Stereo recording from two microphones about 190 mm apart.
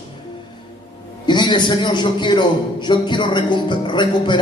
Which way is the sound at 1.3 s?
25° left (ahead or behind).